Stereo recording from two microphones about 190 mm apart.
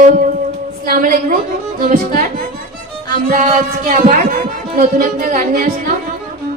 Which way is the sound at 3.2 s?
45° right (ahead or behind).